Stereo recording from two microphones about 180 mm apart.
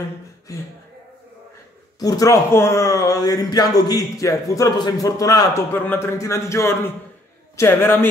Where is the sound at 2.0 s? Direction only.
20° left (ahead or behind).